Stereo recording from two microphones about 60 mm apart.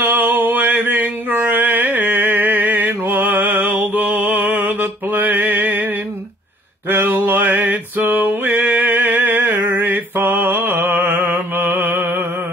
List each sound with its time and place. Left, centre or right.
0.0 s mantra: right
7.1 s music: right